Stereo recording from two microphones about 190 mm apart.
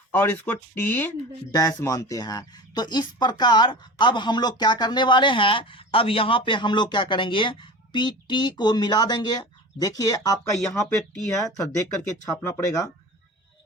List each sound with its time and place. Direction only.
0.1 s speech: 10° left (ahead or behind)